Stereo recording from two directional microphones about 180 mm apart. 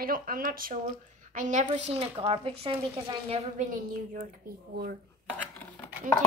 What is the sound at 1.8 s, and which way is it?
Speech, 35° right (ahead or behind).